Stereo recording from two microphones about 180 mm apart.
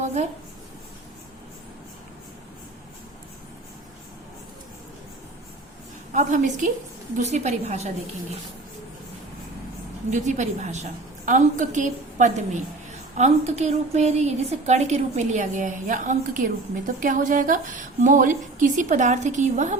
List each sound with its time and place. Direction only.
0.0 s writing: 40° right (ahead or behind)
6.1 s a woman's voice: 45° right (ahead or behind)
10.1 s a woman's voice: 40° right (ahead or behind)